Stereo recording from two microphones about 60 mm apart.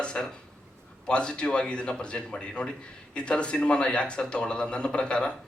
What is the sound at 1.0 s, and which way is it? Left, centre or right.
A man's voice, centre.